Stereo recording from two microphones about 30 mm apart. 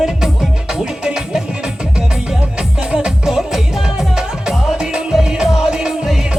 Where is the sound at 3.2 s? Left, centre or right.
Centre.